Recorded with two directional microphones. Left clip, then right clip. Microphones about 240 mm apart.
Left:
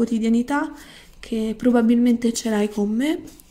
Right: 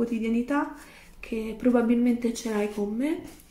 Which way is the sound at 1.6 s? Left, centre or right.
Left.